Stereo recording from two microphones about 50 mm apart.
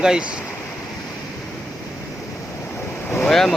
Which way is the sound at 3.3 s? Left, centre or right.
Centre.